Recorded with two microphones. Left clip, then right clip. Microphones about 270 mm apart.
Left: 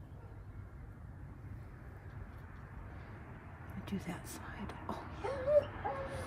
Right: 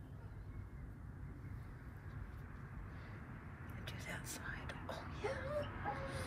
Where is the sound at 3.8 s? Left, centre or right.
Left.